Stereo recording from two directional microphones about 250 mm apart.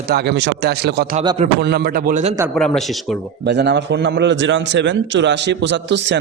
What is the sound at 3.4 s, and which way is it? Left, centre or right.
A man's voice, right.